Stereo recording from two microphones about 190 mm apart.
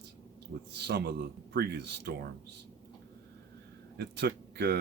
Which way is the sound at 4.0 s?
60° right (ahead or behind).